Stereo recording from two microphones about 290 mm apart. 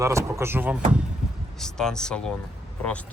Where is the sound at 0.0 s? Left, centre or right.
Centre.